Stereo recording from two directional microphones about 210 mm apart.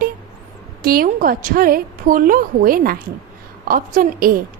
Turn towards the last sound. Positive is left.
turn(degrees=-45)  # may be behind; listen again after turning